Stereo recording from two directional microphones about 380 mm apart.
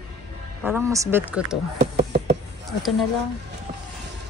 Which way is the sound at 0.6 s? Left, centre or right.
Centre.